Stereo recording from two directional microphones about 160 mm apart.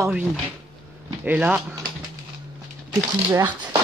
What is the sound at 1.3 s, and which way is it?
Speech, 10° right (ahead or behind).